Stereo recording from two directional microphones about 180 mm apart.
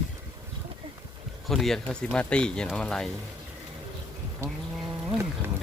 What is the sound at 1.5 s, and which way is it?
Speech, centre (ahead or behind).